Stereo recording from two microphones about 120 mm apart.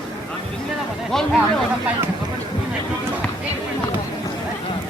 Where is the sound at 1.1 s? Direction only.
5° left (ahead or behind).